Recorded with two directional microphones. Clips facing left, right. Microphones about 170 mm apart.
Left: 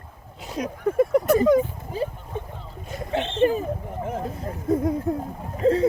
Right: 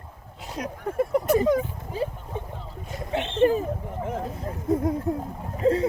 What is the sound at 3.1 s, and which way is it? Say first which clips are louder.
Speech: left 1 dB; 30° left (ahead or behind).